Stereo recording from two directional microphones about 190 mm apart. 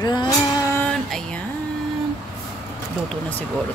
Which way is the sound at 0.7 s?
5° left (ahead or behind).